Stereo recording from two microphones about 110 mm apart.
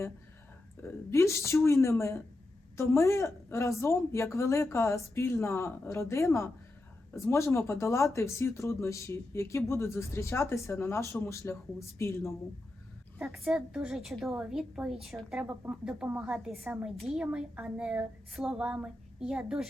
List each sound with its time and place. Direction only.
0.8 s speech: 25° left (ahead or behind)
13.1 s a woman's voice: centre (ahead or behind)